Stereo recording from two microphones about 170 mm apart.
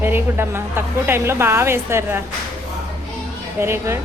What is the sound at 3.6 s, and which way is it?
Speech, 15° right (ahead or behind).